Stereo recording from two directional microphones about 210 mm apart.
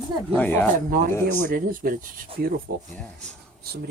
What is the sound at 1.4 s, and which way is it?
Speech, 45° right (ahead or behind).